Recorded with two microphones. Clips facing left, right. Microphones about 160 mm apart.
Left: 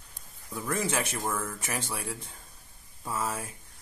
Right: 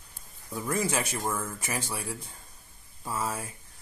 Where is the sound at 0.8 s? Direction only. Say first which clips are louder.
Right 1 dB; 5° right (ahead or behind).